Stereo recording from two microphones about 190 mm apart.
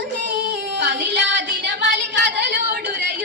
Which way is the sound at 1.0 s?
65° right (ahead or behind).